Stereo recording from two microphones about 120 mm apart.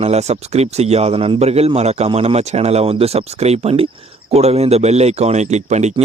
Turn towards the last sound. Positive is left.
turn(degrees=-70)  # may be behind; listen again after turning